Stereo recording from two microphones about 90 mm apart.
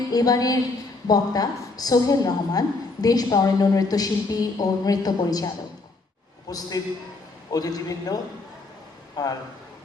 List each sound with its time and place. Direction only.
0.1 s a woman's voice: 45° left (ahead or behind)
6.5 s a woman's voice: 45° left (ahead or behind)